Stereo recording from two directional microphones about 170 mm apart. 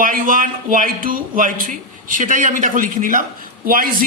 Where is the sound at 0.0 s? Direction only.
55° right (ahead or behind).